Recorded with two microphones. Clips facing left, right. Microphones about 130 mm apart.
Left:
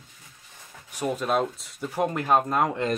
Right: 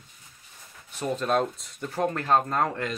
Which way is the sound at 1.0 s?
5° left (ahead or behind).